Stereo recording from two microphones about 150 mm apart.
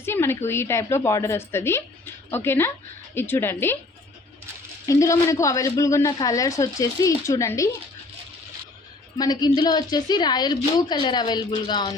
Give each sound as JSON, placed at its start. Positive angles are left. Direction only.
{"t": 0.0, "sound": "a woman's voice", "side_deg": 15}
{"t": 4.9, "sound": "a woman's voice", "side_deg": 20}
{"t": 9.1, "sound": "a woman's voice", "side_deg": 25}